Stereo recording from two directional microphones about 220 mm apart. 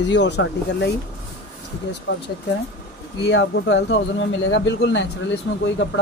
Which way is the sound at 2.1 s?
60° left (ahead or behind).